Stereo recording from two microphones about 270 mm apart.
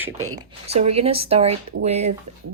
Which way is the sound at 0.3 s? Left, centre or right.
Right.